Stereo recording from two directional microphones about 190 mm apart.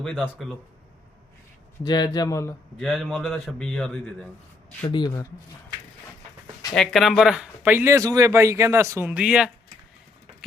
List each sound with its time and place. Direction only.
0.0 s a man's voice: 5° left (ahead or behind)
1.8 s a man's voice: 20° left (ahead or behind)
2.7 s a man's voice: centre (ahead or behind)
4.9 s a man's voice: 25° left (ahead or behind)
6.7 s speech: centre (ahead or behind)